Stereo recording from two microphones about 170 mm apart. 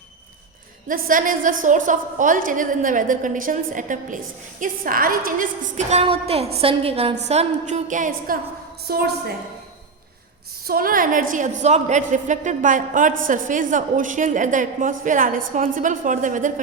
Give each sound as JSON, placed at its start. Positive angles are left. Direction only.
{"t": 0.9, "sound": "a woman's voice", "side_deg": -55}
{"t": 8.9, "sound": "a woman's voice", "side_deg": -65}
{"t": 10.7, "sound": "a woman's voice", "side_deg": -60}